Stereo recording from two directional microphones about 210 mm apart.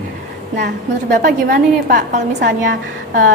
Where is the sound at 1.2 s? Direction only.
40° right (ahead or behind).